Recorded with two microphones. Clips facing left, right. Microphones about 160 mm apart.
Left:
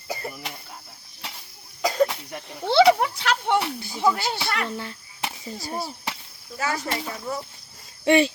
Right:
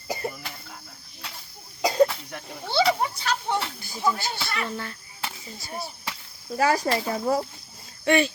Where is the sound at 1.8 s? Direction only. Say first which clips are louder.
Right 2 dB; 20° right (ahead or behind).